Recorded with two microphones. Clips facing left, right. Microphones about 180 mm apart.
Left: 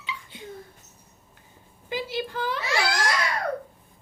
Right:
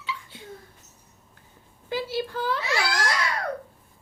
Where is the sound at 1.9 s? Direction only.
15° left (ahead or behind).